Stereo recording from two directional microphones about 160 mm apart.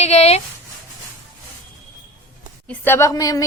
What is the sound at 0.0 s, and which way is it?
Speech, 40° left (ahead or behind).